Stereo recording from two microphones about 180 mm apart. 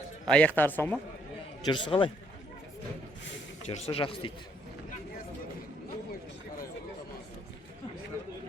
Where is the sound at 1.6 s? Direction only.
25° left (ahead or behind).